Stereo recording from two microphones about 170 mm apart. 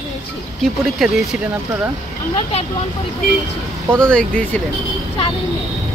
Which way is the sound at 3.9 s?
5° left (ahead or behind).